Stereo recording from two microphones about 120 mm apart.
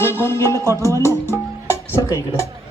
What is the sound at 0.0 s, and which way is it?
Music, 20° left (ahead or behind).